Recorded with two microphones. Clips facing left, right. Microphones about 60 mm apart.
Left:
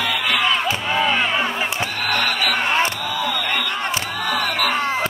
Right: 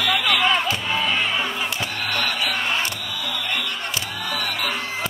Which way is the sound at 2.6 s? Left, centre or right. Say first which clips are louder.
Left 5 dB; left.